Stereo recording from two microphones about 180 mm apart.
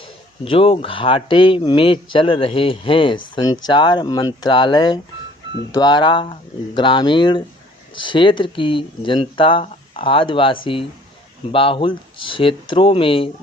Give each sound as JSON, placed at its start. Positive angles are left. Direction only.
{"t": 0.4, "sound": "speech", "side_deg": 30}